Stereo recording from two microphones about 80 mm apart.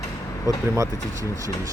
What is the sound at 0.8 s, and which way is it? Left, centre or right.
Speech, right.